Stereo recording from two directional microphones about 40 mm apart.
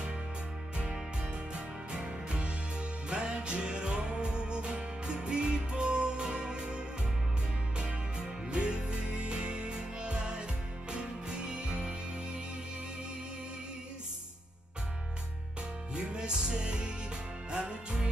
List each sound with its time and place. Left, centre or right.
2.0 s music: right
8.5 s music: right
15.9 s music: right